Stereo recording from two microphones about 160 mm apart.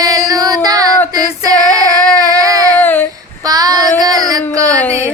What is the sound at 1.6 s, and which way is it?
Child singing, 10° left (ahead or behind).